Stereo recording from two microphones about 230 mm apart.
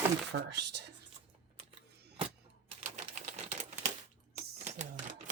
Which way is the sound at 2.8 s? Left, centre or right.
Right.